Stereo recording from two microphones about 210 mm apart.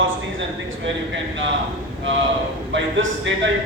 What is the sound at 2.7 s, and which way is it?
Speech, 60° right (ahead or behind).